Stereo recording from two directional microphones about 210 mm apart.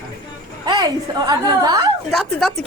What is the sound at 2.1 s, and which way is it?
Speech, centre (ahead or behind).